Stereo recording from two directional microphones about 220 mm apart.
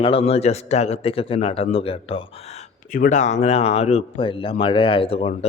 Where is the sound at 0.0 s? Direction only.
25° left (ahead or behind).